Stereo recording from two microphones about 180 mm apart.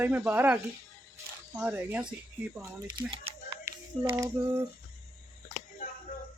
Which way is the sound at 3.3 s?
30° right (ahead or behind).